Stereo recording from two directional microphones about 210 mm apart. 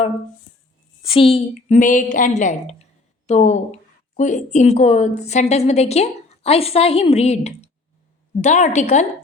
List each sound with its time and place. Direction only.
1.0 s a woman's voice: 25° left (ahead or behind)